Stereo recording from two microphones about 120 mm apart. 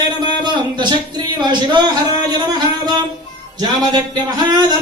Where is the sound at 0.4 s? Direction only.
40° right (ahead or behind).